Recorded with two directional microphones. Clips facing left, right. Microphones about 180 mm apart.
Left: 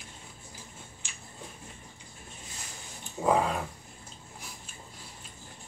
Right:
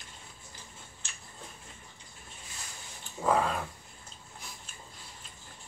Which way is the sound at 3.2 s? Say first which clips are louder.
Left 2 dB; 15° left (ahead or behind).